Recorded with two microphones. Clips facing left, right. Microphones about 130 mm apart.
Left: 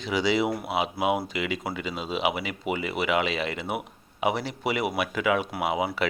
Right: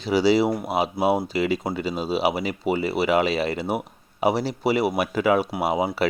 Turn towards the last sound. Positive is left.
turn(degrees=-40)  # may be behind; listen again after turning